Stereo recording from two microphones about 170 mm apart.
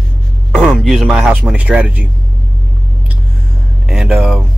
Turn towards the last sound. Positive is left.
turn(degrees=-5)  # may be behind; listen again after turning